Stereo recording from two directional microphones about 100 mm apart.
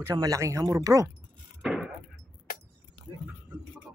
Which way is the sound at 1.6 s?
Centre (ahead or behind).